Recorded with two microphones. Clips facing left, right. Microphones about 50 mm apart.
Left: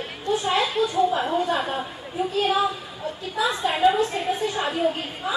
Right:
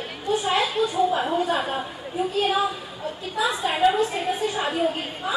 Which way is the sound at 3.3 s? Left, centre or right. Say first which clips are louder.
Even; centre.